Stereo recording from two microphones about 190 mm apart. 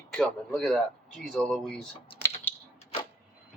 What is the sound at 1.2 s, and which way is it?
Speech, centre (ahead or behind).